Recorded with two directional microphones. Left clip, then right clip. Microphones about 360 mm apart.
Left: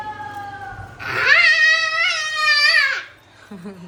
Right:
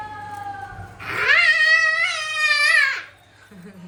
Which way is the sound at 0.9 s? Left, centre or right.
Left.